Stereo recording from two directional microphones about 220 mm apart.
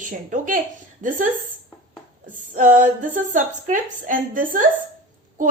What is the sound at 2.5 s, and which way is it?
A woman's voice, 35° right (ahead or behind).